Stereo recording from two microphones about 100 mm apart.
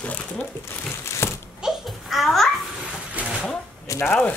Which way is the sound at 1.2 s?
25° left (ahead or behind).